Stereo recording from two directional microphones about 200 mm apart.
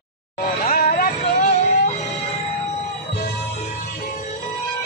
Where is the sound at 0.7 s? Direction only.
45° left (ahead or behind).